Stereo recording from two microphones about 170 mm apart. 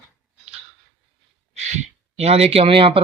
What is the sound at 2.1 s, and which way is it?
Speech, 35° right (ahead or behind).